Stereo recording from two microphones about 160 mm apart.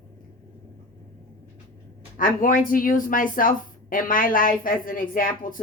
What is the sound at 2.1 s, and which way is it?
A woman's voice, 55° left (ahead or behind).